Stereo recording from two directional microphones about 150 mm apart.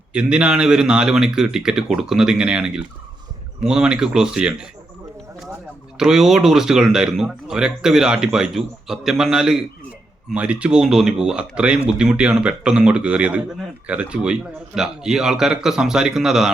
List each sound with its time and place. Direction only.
0.1 s speech: 5° right (ahead or behind)
6.0 s a man's voice: 5° right (ahead or behind)